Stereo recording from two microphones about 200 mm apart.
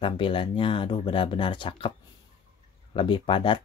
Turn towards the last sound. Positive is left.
turn(degrees=25)  # may be behind; listen again after turning